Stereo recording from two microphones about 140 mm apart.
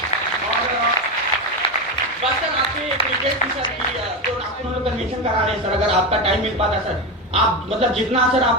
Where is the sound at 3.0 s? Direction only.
40° left (ahead or behind).